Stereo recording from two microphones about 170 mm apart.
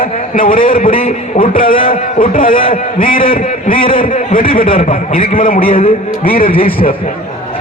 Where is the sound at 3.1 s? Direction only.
55° left (ahead or behind).